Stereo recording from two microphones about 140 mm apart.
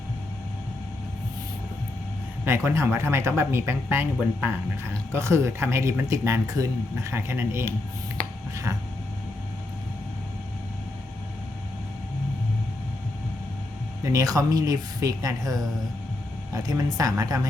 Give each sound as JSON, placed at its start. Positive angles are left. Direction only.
{"t": 2.4, "sound": "speech", "side_deg": -15}
{"t": 14.0, "sound": "speech", "side_deg": -25}